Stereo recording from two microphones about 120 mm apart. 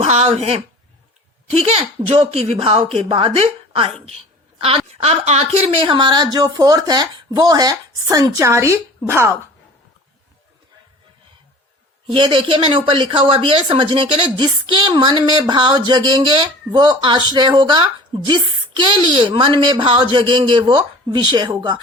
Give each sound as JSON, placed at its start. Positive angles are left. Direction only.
{"t": 0.0, "sound": "a woman's voice", "side_deg": -65}
{"t": 12.1, "sound": "speech", "side_deg": -45}